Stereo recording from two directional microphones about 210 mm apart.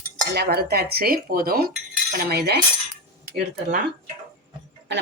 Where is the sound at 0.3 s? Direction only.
45° right (ahead or behind).